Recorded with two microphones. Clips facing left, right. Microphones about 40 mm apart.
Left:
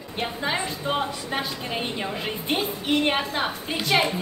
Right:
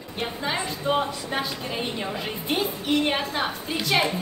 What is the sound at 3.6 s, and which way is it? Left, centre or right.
Speech, centre.